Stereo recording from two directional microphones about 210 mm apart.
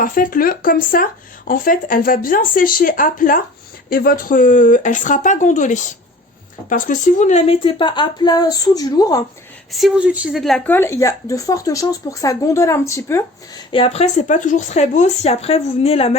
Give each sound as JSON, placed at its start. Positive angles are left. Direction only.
{"t": 0.0, "sound": "a woman's voice", "side_deg": 40}
{"t": 9.7, "sound": "speech", "side_deg": 0}
{"t": 13.7, "sound": "speech", "side_deg": 25}